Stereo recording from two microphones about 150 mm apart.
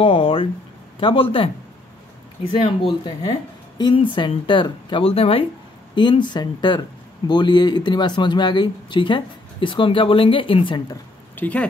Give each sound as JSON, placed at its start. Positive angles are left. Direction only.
{"t": 0.0, "sound": "speech", "side_deg": 40}
{"t": 11.3, "sound": "speech", "side_deg": 10}